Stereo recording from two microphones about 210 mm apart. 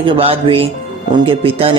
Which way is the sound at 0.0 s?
25° right (ahead or behind).